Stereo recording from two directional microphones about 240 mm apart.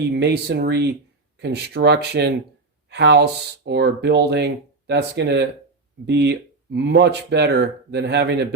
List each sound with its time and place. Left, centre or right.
0.1 s speech: right